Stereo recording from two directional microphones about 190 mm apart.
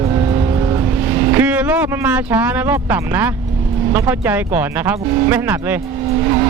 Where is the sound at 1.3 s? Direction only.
10° right (ahead or behind).